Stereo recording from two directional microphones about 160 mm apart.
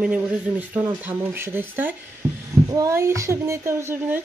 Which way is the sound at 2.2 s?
15° right (ahead or behind).